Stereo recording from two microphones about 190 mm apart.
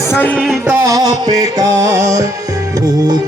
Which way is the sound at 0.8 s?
20° right (ahead or behind).